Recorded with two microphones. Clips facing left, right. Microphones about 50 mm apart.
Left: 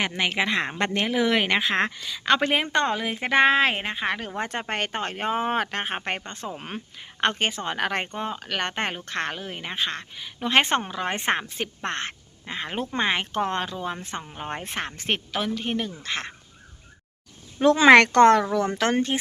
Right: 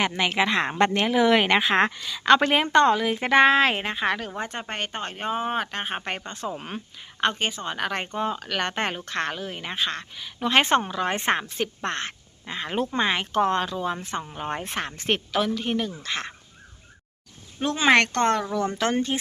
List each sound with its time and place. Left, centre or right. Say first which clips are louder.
0.0 s a woman's voice: right 2 dB; centre
2.0 s a woman's voice: right 4 dB; centre
4.4 s speech: left 2 dB; left
6.2 s speech: right 2 dB; left
7.2 s speech: left 1 dB; left
8.0 s a woman's voice: right 3 dB; left
17.6 s speech: left 8 dB; left
18.5 s speech: left 1 dB; left